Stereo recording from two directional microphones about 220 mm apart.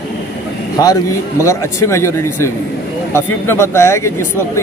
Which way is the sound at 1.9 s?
10° left (ahead or behind).